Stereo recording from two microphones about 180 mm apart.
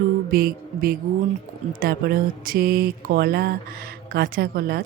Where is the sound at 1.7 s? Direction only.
55° right (ahead or behind).